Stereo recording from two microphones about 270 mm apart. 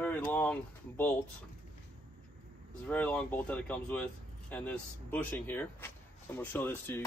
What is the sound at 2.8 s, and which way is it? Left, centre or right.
Speech, centre.